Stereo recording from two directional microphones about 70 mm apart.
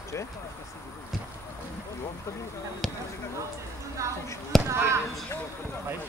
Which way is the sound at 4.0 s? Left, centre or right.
Right.